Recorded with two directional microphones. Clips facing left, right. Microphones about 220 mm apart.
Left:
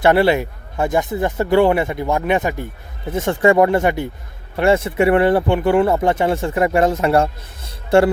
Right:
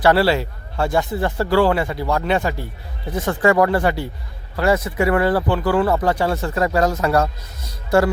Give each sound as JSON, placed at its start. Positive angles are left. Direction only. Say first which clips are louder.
{"t": 0.0, "sound": "speech", "louder": "left 2 dB", "side_deg": 20}
{"t": 7.9, "sound": "music", "louder": "left 3 dB", "side_deg": 25}